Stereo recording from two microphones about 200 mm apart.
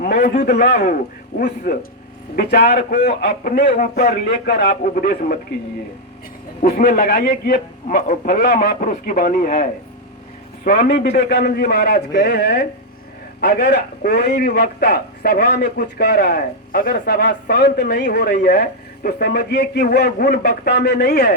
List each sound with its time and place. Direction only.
0.0 s a man's voice: 50° left (ahead or behind)
6.6 s a man's voice: 45° left (ahead or behind)